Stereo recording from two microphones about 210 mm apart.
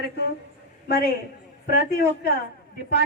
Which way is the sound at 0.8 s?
50° left (ahead or behind).